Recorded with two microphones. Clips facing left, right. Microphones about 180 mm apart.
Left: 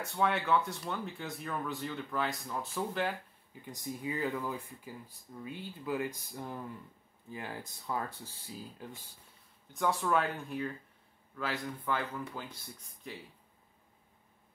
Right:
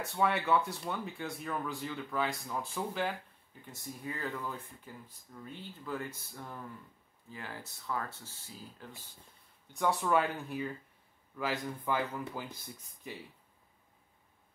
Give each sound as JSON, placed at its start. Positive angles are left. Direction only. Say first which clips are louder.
{"t": 0.0, "sound": "speech", "louder": "even", "side_deg": 0}
{"t": 3.7, "sound": "speech", "louder": "left 5 dB", "side_deg": 15}
{"t": 4.5, "sound": "speech", "louder": "left 3 dB", "side_deg": 0}
{"t": 5.3, "sound": "speech", "louder": "left 4 dB", "side_deg": 15}
{"t": 9.8, "sound": "speech", "louder": "right 1 dB", "side_deg": -5}